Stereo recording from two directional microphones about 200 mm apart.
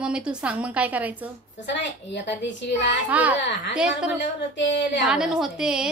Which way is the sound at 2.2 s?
65° left (ahead or behind).